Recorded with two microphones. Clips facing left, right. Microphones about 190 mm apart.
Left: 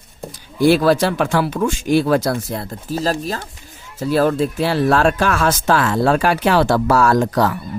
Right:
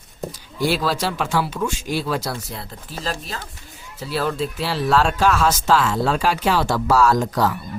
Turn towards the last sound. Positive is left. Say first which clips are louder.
# left 3 dB
turn(degrees=60)  # may be behind; listen again after turning